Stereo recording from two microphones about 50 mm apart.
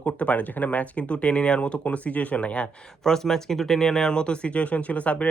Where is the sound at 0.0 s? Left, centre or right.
Left.